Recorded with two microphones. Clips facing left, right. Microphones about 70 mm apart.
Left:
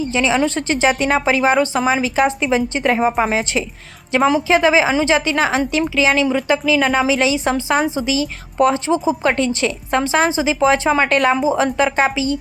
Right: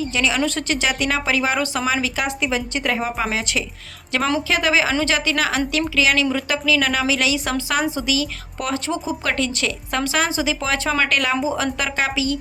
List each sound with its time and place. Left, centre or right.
0.1 s a woman's voice: left
4.1 s a woman's voice: centre